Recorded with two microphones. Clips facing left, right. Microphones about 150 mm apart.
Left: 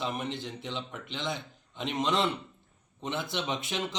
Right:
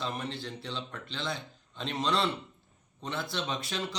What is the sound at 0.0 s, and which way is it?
A man's voice, 20° left (ahead or behind).